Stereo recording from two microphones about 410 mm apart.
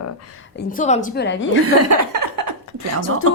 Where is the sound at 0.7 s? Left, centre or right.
Centre.